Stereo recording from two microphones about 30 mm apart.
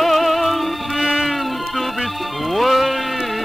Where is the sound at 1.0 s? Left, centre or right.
Centre.